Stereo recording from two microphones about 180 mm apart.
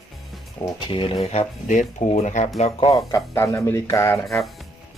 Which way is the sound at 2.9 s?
15° left (ahead or behind).